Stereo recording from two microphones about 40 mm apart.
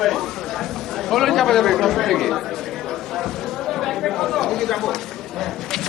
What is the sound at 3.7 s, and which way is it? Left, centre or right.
Chatter, centre.